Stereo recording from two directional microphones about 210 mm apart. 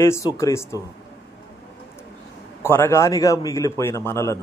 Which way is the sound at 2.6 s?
10° left (ahead or behind).